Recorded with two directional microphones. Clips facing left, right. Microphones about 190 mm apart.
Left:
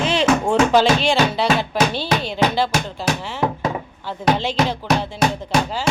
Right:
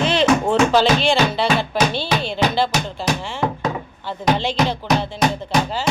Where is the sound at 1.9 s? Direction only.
40° left (ahead or behind).